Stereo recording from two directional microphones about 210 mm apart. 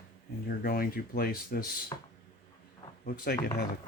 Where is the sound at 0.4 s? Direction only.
45° left (ahead or behind).